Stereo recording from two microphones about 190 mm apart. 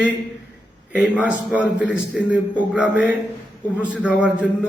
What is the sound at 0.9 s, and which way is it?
A man's voice, 5° right (ahead or behind).